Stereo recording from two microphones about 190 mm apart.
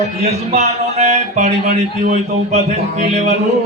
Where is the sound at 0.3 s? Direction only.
35° right (ahead or behind).